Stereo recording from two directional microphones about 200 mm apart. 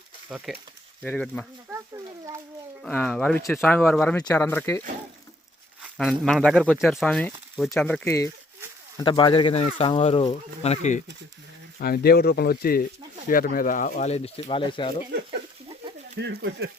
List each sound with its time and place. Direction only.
0.3 s speech: 5° right (ahead or behind)
2.8 s speech: 5° left (ahead or behind)
5.8 s speech: centre (ahead or behind)
9.0 s speech: 25° left (ahead or behind)
11.8 s speech: 50° left (ahead or behind); by 15.0 s 25° left (ahead or behind)
16.1 s speech: 60° right (ahead or behind)